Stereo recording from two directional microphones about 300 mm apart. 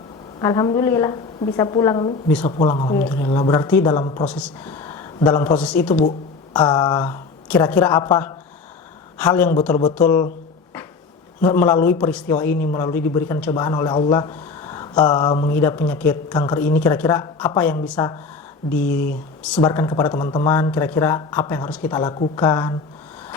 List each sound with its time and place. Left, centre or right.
0.3 s a man's voice: centre
2.6 s a man's voice: centre
4.3 s a man's voice: centre
11.4 s a man's voice: centre
19.4 s a man's voice: centre